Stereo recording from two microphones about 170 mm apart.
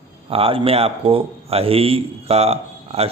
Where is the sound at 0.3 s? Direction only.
35° right (ahead or behind).